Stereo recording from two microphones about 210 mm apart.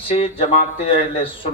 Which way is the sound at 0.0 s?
25° left (ahead or behind).